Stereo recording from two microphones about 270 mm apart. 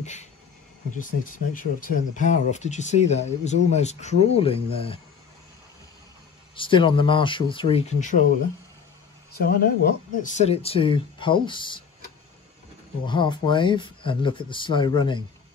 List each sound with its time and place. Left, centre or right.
0.0 s a sound: left
1.5 s speech: left
6.5 s speech: centre
9.4 s speech: left
13.0 s speech: centre